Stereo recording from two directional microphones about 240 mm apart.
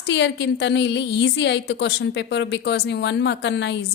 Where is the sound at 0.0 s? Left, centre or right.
Left.